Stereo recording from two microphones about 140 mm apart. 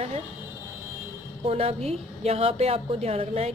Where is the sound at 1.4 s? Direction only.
45° right (ahead or behind).